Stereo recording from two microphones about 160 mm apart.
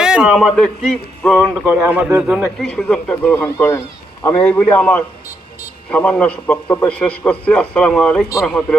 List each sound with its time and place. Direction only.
0.0 s speech: 5° right (ahead or behind)
1.4 s a man's voice: 10° right (ahead or behind)
3.3 s a man's voice: 15° left (ahead or behind)